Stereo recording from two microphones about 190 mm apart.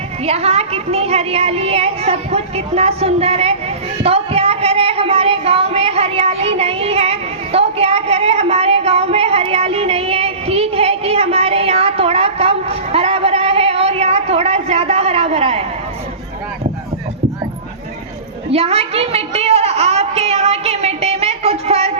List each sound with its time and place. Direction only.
0.3 s a woman's voice: 30° right (ahead or behind)
18.5 s a woman's voice: 30° right (ahead or behind)